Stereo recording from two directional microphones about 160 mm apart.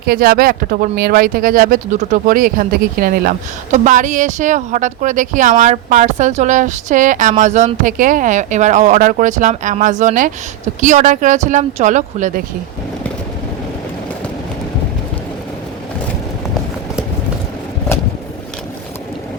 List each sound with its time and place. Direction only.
0.0 s speech: 70° right (ahead or behind); by 12.4 s 50° right (ahead or behind)